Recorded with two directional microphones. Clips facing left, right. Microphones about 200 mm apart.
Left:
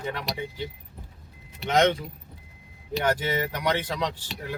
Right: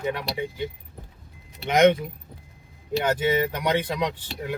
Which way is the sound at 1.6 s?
15° right (ahead or behind).